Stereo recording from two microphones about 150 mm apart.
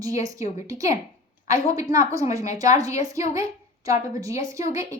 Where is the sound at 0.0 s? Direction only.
20° right (ahead or behind).